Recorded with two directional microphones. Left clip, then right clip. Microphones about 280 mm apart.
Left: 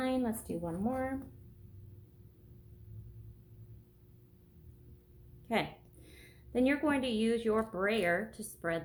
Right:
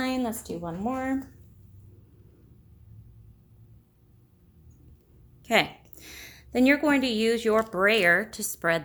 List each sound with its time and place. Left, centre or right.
0.0 s speech: right
5.5 s a woman's voice: right